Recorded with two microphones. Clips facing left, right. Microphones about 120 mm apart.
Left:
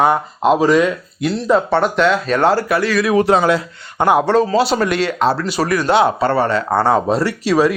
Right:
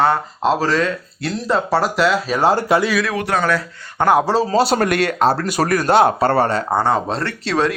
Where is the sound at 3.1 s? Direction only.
25° left (ahead or behind).